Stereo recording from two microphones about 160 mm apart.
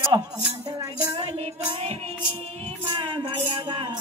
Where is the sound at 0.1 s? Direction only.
20° right (ahead or behind).